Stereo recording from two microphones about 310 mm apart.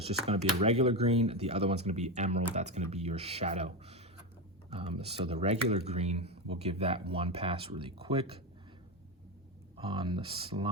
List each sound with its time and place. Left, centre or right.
0.0 s speech: centre
9.7 s speech: centre